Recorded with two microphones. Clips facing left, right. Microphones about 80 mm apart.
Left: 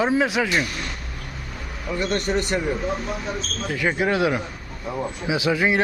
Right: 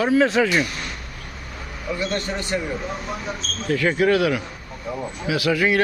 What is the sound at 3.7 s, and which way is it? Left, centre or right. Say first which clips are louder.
Speech: right 4 dB; centre.